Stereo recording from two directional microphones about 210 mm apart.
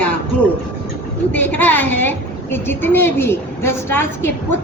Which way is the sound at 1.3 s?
10° left (ahead or behind).